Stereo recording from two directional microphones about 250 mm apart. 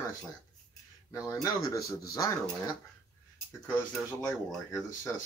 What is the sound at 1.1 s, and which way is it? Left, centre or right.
Speech, centre.